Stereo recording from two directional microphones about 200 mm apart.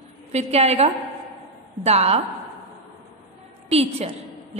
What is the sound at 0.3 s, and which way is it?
Speech, 30° right (ahead or behind).